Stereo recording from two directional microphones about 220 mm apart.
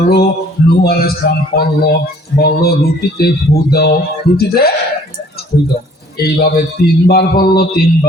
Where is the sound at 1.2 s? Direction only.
45° left (ahead or behind).